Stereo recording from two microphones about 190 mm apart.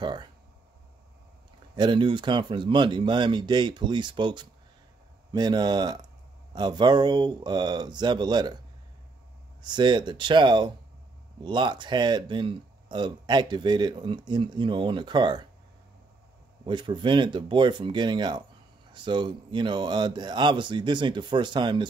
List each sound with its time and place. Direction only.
0.0 s speech: 25° right (ahead or behind)
1.8 s speech: 25° right (ahead or behind)
9.6 s speech: 25° right (ahead or behind)
16.6 s speech: 25° right (ahead or behind)